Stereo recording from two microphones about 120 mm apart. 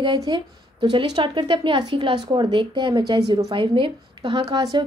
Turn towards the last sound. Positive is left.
turn(degrees=-35)  # may be behind; listen again after turning